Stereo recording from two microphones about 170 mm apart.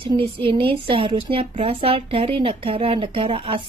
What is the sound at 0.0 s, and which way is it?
A woman's voice, 30° right (ahead or behind).